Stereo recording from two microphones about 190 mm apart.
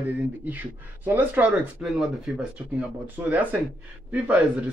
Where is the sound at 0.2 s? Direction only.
10° right (ahead or behind).